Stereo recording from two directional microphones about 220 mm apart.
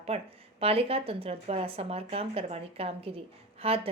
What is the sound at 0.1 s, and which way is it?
Speech, 25° right (ahead or behind).